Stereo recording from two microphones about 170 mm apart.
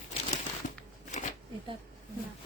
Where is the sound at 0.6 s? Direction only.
45° left (ahead or behind).